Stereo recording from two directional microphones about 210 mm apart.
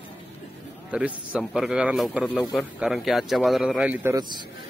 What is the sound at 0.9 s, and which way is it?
A man's voice, 5° right (ahead or behind).